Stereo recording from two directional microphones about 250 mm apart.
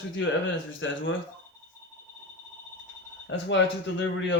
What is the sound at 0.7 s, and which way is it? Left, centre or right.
Speech, left.